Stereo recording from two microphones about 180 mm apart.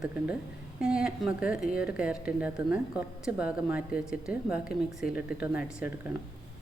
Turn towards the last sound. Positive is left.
turn(degrees=-10)  # may be behind; listen again after turning